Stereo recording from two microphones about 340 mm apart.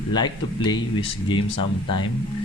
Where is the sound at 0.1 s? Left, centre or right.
Centre.